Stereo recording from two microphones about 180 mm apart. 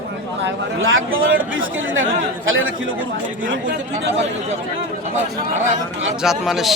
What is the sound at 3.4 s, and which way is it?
Speech, 50° right (ahead or behind).